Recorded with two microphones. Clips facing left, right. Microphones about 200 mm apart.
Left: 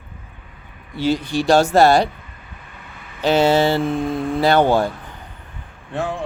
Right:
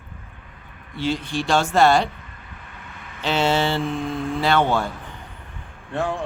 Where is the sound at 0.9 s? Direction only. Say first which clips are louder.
Left 5 dB; 40° left (ahead or behind).